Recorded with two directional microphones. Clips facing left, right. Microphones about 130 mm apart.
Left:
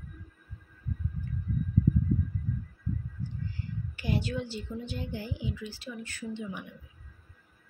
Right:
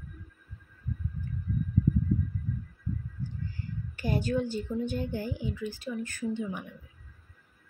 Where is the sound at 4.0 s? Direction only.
45° right (ahead or behind).